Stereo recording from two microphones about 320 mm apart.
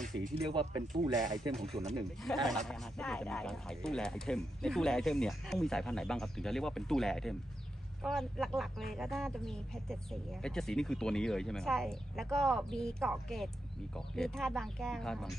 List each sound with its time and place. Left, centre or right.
0.0 s speech: centre
1.5 s speech: centre
1.8 s speech: right
2.6 s speech: centre